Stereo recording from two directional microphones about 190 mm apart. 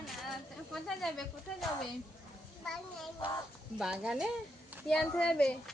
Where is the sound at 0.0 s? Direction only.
Centre (ahead or behind).